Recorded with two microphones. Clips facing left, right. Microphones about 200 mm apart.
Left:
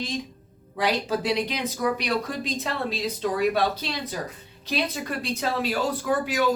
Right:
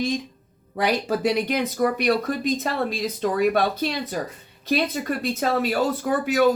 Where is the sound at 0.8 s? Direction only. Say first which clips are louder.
Right 3 dB; 55° right (ahead or behind).